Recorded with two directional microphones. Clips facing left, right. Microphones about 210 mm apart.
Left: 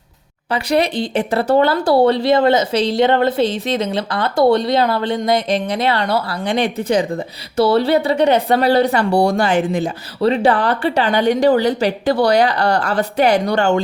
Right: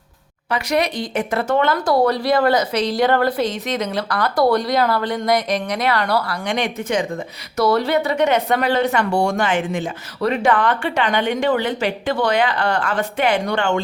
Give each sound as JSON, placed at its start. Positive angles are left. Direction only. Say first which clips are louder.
{"t": 0.5, "sound": "speech", "louder": "left 3 dB", "side_deg": 30}